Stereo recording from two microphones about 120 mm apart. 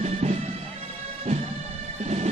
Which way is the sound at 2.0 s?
65° right (ahead or behind).